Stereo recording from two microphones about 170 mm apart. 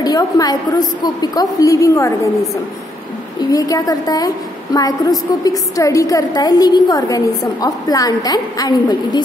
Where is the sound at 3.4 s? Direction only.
20° left (ahead or behind).